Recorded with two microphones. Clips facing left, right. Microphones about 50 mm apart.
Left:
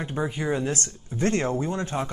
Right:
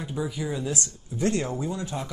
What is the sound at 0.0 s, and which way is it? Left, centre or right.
Speech, left.